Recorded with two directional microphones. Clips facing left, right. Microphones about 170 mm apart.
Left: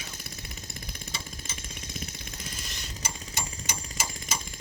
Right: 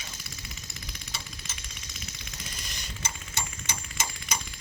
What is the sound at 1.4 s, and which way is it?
Jackhammer, 50° left (ahead or behind).